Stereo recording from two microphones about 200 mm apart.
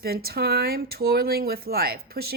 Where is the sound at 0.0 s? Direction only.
50° right (ahead or behind).